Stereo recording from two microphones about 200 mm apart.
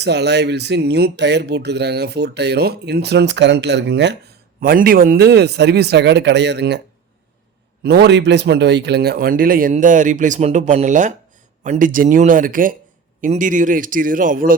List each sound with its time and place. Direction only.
0.0 s speech: 60° right (ahead or behind)
4.6 s speech: 45° right (ahead or behind)
7.9 s a man's voice: 55° right (ahead or behind)